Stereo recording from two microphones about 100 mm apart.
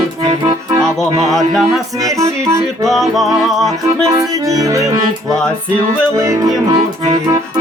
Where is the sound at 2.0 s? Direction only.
35° right (ahead or behind).